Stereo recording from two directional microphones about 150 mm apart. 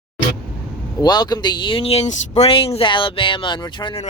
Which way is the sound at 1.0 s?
25° left (ahead or behind).